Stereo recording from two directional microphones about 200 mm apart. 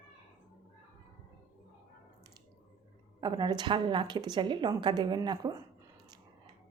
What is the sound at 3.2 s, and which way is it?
A woman's voice, 20° right (ahead or behind).